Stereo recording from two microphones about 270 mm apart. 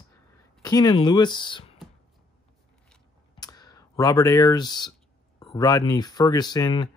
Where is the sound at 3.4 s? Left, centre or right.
Centre.